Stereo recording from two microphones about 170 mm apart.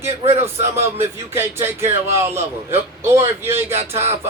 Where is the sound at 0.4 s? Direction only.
15° right (ahead or behind).